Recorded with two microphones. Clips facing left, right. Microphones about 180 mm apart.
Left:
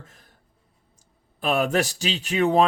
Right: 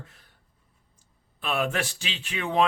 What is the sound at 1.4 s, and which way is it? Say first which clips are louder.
Speech: left 6 dB; 40° left (ahead or behind).